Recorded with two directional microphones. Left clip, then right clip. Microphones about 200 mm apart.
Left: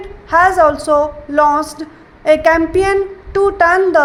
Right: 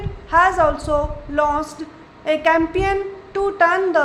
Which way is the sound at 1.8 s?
30° left (ahead or behind).